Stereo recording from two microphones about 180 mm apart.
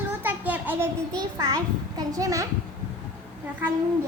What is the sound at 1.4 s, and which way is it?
Music, 20° right (ahead or behind).